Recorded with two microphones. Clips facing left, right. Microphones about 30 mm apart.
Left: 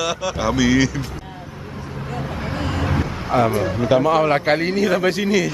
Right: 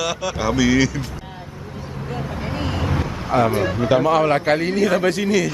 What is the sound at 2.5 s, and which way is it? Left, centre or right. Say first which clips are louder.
Vehicle: even; centre.